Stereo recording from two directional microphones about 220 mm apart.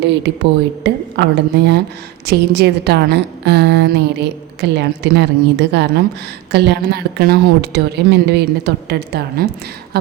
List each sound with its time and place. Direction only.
0.9 s a woman's voice: 50° right (ahead or behind)
9.9 s beatboxing: 45° right (ahead or behind)